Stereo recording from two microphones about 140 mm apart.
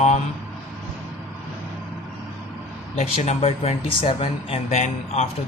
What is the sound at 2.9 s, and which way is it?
Speech, 55° left (ahead or behind).